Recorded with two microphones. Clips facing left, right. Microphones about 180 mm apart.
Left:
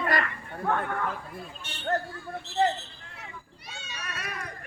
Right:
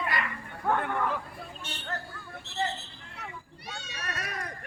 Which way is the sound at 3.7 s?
55° right (ahead or behind).